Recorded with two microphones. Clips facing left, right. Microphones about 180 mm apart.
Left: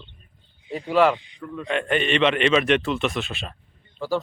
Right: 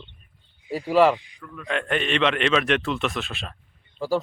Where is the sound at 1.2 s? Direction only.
25° left (ahead or behind).